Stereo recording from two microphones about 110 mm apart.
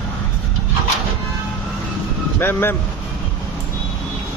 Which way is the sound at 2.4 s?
20° left (ahead or behind).